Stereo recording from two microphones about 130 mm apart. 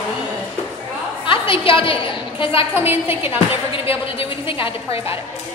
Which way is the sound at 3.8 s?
45° left (ahead or behind).